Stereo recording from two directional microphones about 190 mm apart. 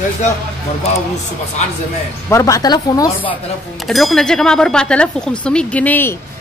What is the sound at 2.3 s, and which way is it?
Speech, 15° left (ahead or behind).